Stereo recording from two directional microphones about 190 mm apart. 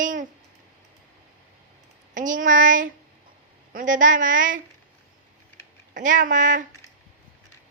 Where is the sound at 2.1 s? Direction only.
45° right (ahead or behind).